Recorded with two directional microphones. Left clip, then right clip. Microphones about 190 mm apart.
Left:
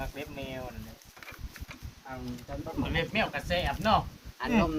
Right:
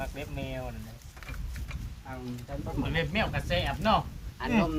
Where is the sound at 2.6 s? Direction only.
Centre (ahead or behind).